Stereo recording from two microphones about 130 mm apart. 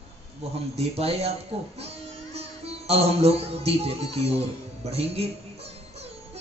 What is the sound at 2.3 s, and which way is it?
Speech, 50° right (ahead or behind).